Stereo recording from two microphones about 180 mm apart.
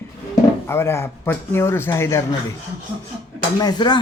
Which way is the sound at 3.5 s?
20° left (ahead or behind).